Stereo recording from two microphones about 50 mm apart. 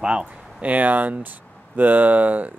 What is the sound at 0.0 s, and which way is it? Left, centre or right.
Speech, right.